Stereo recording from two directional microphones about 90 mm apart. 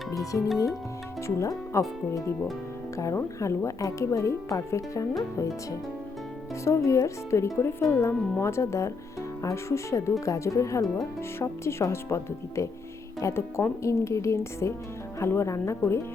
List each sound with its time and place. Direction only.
0.1 s speech: 40° left (ahead or behind)
3.0 s speech: 35° left (ahead or behind)
6.7 s speech: 35° left (ahead or behind)